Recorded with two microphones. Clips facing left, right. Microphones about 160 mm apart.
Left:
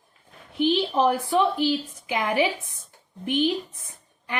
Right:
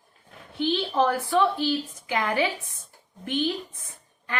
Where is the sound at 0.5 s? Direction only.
15° left (ahead or behind).